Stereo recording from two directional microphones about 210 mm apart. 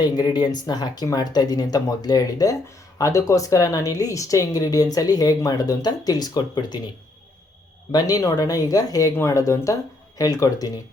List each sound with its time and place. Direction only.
0.0 s speech: 20° left (ahead or behind)
7.9 s speech: 15° left (ahead or behind)